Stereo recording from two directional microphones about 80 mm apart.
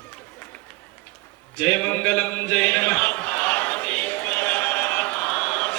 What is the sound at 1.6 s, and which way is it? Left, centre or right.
A man's voice, centre.